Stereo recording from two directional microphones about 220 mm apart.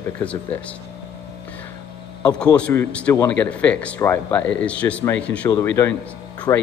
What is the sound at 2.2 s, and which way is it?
A man's voice, 5° left (ahead or behind).